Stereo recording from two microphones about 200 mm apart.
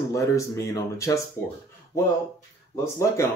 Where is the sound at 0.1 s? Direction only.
15° left (ahead or behind).